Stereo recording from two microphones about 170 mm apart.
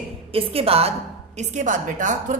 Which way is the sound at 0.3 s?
35° right (ahead or behind).